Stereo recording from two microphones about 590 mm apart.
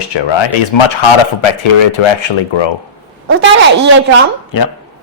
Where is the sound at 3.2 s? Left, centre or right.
Right.